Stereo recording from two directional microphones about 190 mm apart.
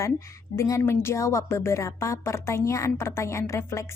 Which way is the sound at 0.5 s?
15° left (ahead or behind).